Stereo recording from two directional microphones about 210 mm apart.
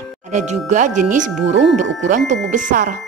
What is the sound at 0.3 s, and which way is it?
A woman's voice, 35° right (ahead or behind).